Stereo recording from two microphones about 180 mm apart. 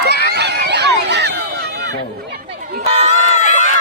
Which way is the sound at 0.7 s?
70° right (ahead or behind).